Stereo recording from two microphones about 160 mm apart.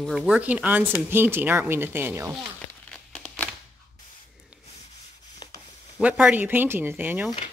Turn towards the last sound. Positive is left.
turn(degrees=-10)  # may be behind; listen again after turning